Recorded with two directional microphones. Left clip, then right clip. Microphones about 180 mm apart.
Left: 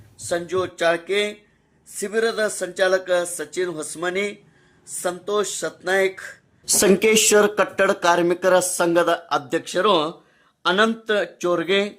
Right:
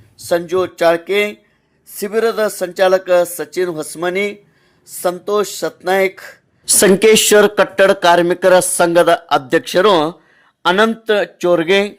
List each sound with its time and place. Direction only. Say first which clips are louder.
0.2 s speech: right 8 dB; 40° right (ahead or behind)
6.7 s speech: right 7 dB; 25° right (ahead or behind)